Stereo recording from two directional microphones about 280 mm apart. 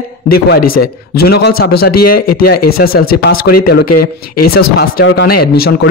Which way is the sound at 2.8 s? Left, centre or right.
Left.